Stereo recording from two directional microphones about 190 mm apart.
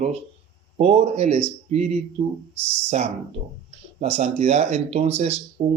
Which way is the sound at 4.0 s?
35° right (ahead or behind).